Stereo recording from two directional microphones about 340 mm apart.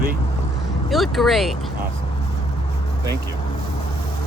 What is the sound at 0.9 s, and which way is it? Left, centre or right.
Speech, centre.